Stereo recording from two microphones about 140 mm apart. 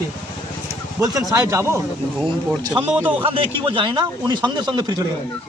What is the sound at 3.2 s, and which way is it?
A man's voice, 40° right (ahead or behind).